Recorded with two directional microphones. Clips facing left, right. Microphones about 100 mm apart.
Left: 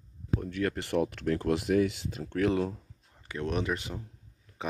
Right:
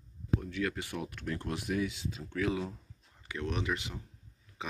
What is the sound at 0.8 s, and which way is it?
Speech, 75° left (ahead or behind).